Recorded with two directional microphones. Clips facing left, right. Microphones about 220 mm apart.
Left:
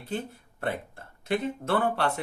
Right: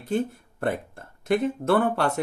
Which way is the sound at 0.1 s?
45° right (ahead or behind).